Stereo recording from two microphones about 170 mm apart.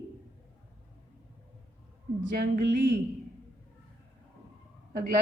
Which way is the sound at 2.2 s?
60° right (ahead or behind).